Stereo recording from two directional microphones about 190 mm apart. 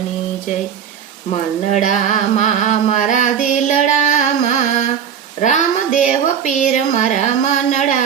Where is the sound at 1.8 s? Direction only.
40° left (ahead or behind).